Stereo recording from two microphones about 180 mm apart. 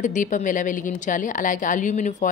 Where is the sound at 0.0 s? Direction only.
45° left (ahead or behind).